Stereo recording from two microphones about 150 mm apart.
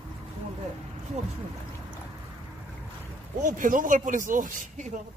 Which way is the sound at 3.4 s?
60° right (ahead or behind).